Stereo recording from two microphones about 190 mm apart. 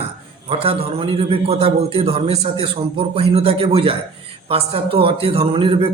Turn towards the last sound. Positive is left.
turn(degrees=-30)  # may be behind; listen again after turning